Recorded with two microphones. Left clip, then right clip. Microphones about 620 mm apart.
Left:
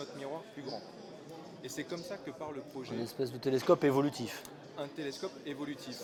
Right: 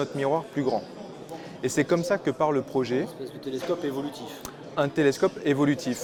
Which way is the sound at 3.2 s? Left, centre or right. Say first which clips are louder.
Even; left.